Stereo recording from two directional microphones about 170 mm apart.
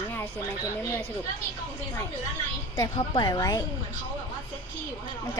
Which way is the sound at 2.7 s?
20° left (ahead or behind).